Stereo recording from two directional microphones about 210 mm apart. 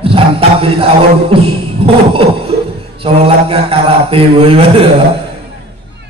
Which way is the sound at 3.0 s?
25° right (ahead or behind).